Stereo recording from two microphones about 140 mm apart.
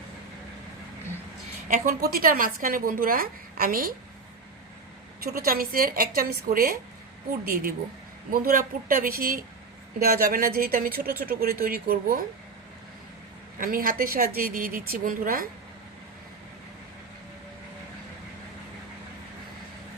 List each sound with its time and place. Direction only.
1.6 s a woman's voice: 80° right
5.2 s a woman's voice: 90° right
13.6 s a woman's voice: 90° right